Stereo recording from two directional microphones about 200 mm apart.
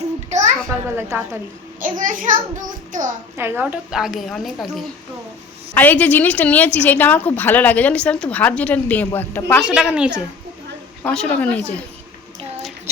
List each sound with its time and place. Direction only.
0.3 s a sound: 35° right (ahead or behind)
0.7 s a child's voice: 10° right (ahead or behind)
1.8 s a child's voice: 40° right (ahead or behind)
3.3 s a woman's voice: 10° right (ahead or behind)
5.7 s a woman's voice: 10° left (ahead or behind)
9.6 s a woman's voice: 5° right (ahead or behind)